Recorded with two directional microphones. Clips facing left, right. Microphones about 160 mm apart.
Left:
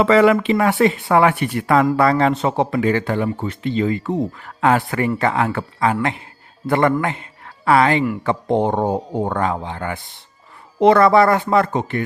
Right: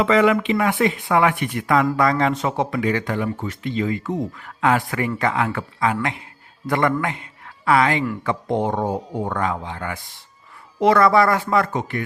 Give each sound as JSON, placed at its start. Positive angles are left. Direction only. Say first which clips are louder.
{"t": 0.0, "sound": "a man's voice", "louder": "left 3 dB", "side_deg": 40}